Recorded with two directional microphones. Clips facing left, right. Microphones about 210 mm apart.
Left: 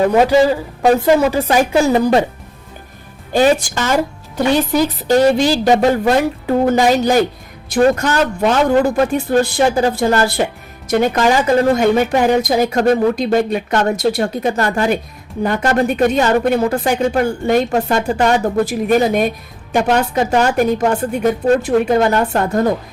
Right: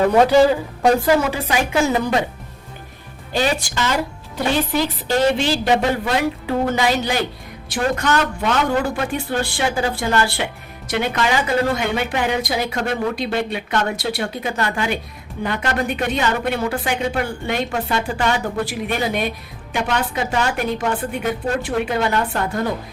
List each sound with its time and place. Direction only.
0.2 s speech: 10° left (ahead or behind)
1.3 s speech: 40° left (ahead or behind)
3.3 s speech: 50° left (ahead or behind)